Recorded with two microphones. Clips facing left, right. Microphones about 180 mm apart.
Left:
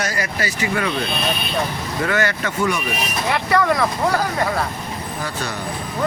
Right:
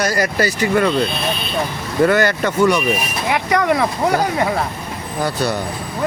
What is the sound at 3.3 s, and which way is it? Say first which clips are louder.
Speech: right 2 dB; 20° right (ahead or behind).